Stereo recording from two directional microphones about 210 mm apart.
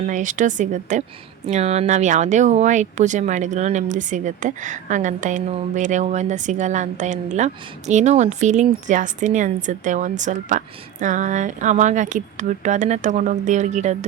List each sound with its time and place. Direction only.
0.1 s speech: 35° right (ahead or behind)